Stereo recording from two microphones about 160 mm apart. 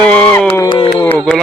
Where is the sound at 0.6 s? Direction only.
30° left (ahead or behind).